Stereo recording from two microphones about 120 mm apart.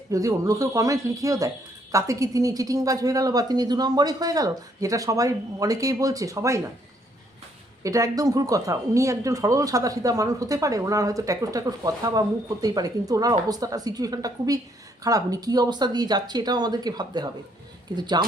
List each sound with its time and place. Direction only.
0.1 s a woman's voice: 25° right (ahead or behind)
7.9 s a woman's voice: 30° right (ahead or behind)